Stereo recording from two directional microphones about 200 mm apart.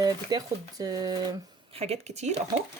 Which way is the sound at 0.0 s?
20° right (ahead or behind).